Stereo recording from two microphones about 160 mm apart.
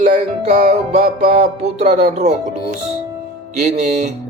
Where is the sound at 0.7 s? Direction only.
45° right (ahead or behind).